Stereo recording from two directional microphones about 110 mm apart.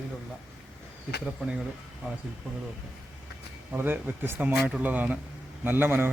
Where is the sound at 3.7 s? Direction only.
20° right (ahead or behind).